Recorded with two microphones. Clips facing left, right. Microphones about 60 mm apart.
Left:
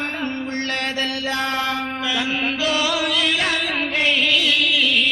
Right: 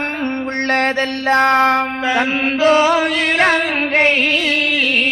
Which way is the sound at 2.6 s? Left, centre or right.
Right.